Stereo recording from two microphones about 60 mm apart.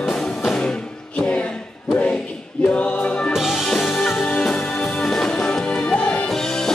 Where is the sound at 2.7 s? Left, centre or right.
Left.